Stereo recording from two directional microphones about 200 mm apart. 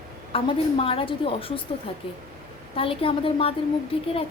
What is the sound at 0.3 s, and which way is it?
A woman's voice, 25° left (ahead or behind).